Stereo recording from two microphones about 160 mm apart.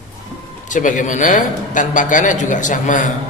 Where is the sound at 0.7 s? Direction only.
55° left (ahead or behind).